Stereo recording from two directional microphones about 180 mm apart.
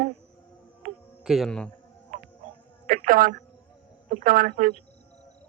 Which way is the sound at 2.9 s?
50° right (ahead or behind).